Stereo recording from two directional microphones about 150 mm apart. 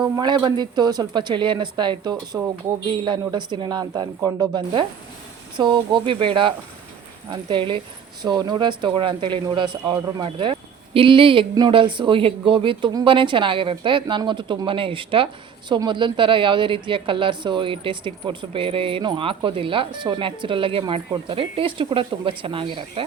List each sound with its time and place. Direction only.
0.2 s a woman's voice: 30° right (ahead or behind)